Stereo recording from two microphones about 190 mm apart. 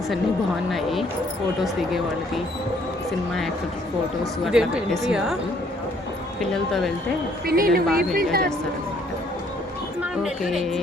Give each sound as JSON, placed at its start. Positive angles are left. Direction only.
{"t": 0.7, "sound": "speech", "side_deg": 0}
{"t": 6.4, "sound": "speech", "side_deg": 0}
{"t": 7.4, "sound": "a woman's voice", "side_deg": -50}
{"t": 10.0, "sound": "speech", "side_deg": 0}